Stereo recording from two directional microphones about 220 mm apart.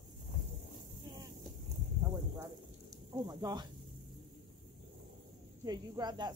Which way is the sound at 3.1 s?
15° right (ahead or behind).